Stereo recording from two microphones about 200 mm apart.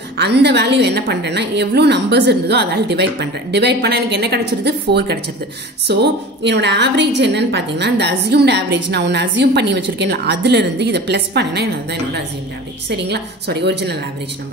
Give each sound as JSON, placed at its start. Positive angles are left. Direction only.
{"t": 0.2, "sound": "a woman's voice", "side_deg": -55}